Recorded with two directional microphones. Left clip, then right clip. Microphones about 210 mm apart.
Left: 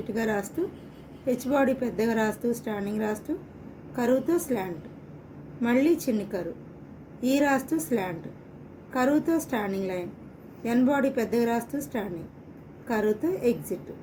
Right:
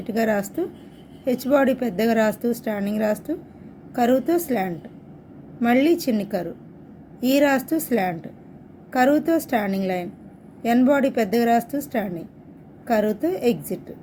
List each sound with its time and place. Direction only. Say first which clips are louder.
0.1 s a woman's voice: right 7 dB; 50° right (ahead or behind)